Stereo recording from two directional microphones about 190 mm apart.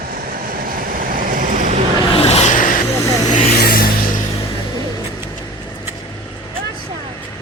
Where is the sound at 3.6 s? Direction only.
50° left (ahead or behind).